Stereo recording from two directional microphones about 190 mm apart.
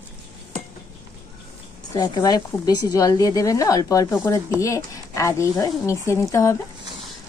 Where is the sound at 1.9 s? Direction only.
20° left (ahead or behind).